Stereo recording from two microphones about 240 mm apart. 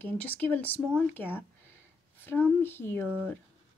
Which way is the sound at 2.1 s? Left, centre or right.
Centre.